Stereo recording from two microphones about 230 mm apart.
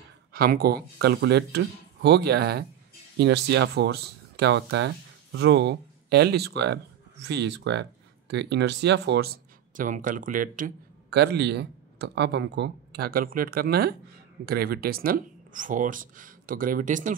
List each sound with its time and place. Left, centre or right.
0.3 s speech: right